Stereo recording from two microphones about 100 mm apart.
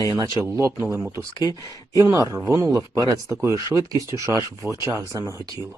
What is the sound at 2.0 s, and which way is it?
A man's voice, 35° right (ahead or behind).